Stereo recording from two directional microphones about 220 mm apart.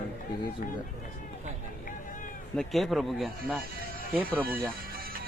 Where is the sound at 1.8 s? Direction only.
35° left (ahead or behind).